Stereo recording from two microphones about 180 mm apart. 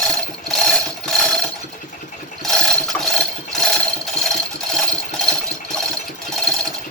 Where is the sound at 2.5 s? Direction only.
Centre (ahead or behind).